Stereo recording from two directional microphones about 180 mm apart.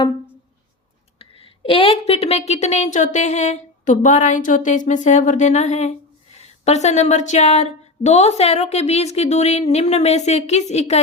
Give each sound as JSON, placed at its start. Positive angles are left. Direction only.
{"t": 1.4, "sound": "speech", "side_deg": 30}